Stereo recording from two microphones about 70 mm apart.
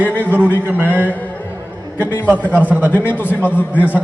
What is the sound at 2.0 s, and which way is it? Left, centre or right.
A man's voice, left.